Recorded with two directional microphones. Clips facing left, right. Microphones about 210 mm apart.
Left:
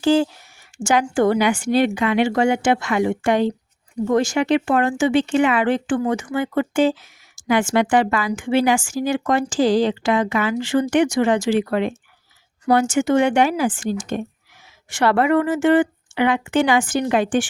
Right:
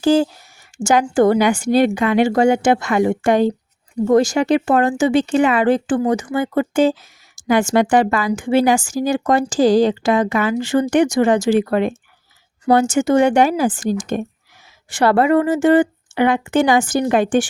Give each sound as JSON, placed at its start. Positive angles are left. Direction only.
{"t": 0.0, "sound": "speech", "side_deg": -40}
{"t": 14.8, "sound": "speech", "side_deg": -35}